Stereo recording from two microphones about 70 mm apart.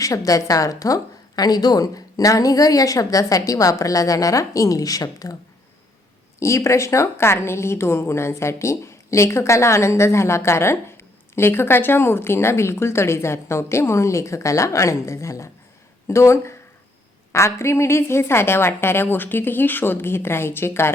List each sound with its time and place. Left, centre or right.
0.0 s a woman's voice: left
6.4 s a woman's voice: left